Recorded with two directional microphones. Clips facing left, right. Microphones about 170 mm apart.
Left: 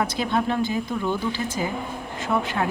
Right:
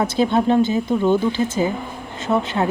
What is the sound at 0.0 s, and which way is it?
Speech, 25° right (ahead or behind).